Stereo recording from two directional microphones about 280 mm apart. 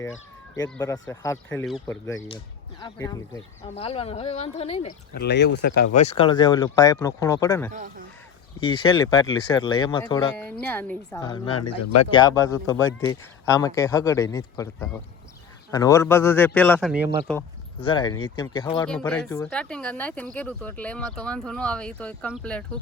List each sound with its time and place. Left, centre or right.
0.5 s speech: centre
5.1 s speech: left; by 7.7 s centre
7.7 s speech: right
8.6 s speech: centre
11.2 s speech: centre
11.6 s speech: left
12.1 s speech: centre
17.7 s speech: centre
18.9 s speech: centre